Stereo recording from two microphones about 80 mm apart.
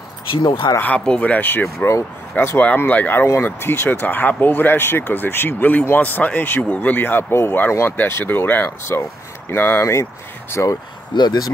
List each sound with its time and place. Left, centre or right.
0.3 s speech: left
0.7 s speech: centre
10.5 s speech: left
11.1 s speech: left